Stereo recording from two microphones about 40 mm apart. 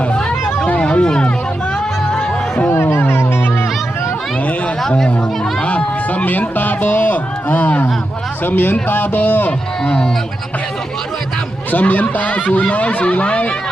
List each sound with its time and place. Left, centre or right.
0.1 s a sound: left
2.6 s music: left
4.8 s chatter: centre
5.6 s a sound: left
8.4 s speech: left
9.5 s speech: left
11.7 s speech: left